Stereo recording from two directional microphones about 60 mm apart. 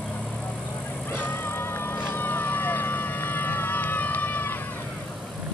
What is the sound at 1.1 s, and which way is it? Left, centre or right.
Music, left.